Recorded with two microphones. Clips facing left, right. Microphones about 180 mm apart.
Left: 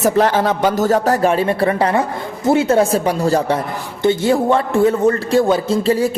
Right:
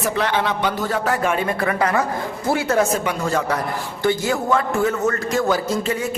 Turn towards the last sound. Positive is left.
turn(degrees=35)  # may be behind; listen again after turning